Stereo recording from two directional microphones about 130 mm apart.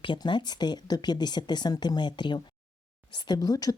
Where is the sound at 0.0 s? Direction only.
40° left (ahead or behind).